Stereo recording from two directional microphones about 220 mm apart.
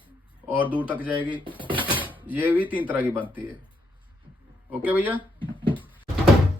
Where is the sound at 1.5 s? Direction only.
20° right (ahead or behind).